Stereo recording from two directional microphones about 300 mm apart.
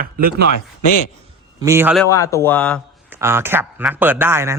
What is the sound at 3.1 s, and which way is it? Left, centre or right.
Speech, centre.